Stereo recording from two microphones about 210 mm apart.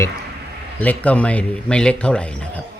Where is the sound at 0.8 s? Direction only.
5° left (ahead or behind).